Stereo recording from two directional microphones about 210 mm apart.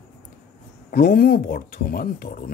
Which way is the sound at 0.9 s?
45° left (ahead or behind).